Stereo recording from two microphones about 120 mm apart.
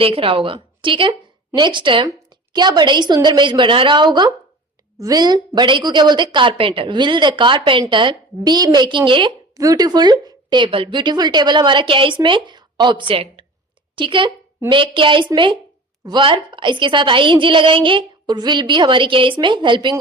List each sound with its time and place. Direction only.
0.0 s a woman's voice: 50° right (ahead or behind)
9.6 s a woman's voice: 30° right (ahead or behind)